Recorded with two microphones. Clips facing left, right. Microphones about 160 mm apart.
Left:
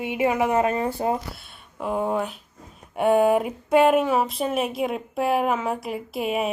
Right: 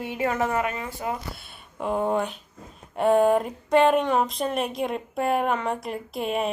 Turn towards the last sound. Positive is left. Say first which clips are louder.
# left 1 dB
turn(degrees=5)  # may be behind; listen again after turning